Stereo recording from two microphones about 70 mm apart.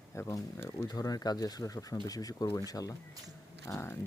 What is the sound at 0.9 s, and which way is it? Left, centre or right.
Speech, left.